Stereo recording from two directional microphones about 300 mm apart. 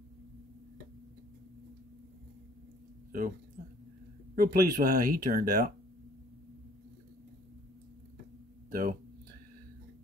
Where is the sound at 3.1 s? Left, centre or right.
Right.